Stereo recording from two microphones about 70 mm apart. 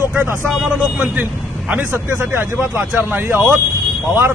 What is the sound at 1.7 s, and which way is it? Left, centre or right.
Speech, right.